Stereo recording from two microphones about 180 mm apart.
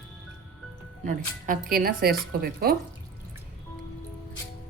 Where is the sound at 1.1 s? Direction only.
45° right (ahead or behind).